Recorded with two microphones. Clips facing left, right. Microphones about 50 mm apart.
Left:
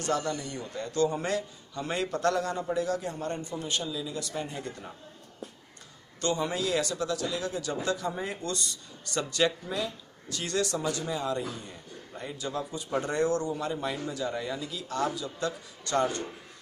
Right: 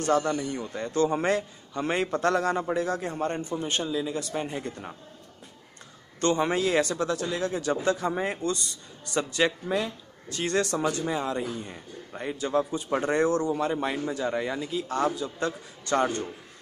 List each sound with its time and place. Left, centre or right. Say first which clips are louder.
0.0 s speech: right 5 dB; right
1.0 s a man's voice: right 3 dB; right
6.2 s a man's voice: right 5 dB; right